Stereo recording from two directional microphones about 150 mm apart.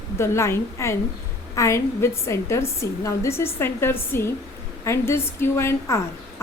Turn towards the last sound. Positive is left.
turn(degrees=15)  # may be behind; listen again after turning